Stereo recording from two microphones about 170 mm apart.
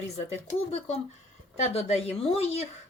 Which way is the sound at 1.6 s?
40° left (ahead or behind).